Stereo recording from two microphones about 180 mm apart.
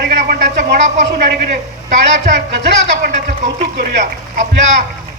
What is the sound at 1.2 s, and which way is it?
Speech, 65° right (ahead or behind).